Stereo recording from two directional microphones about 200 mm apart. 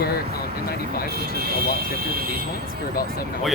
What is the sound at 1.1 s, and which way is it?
Speech, 50° right (ahead or behind).